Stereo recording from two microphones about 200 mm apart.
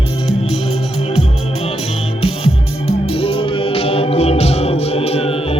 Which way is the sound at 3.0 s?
30° left (ahead or behind).